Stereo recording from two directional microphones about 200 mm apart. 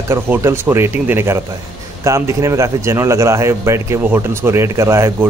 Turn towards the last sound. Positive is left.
turn(degrees=-15)  # may be behind; listen again after turning